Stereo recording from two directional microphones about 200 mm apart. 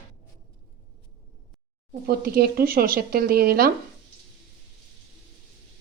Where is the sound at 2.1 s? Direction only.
50° right (ahead or behind).